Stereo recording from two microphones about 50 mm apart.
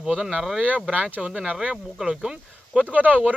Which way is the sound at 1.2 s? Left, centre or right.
Centre.